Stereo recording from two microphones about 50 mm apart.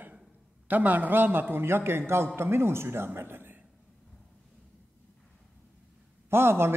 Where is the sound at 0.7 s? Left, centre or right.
Right.